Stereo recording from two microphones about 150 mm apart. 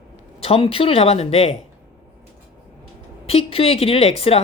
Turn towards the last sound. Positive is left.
turn(degrees=40)  # may be behind; listen again after turning